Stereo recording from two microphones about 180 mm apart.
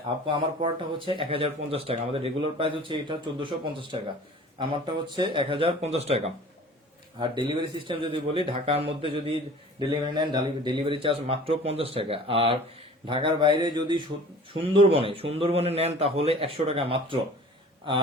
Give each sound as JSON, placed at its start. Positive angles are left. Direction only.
{"t": 0.3, "sound": "speech", "side_deg": -30}
{"t": 5.1, "sound": "a man's voice", "side_deg": -25}